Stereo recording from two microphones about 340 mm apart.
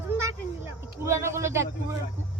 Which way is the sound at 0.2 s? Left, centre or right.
Centre.